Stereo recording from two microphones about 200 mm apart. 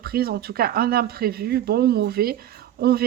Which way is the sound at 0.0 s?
50° right (ahead or behind).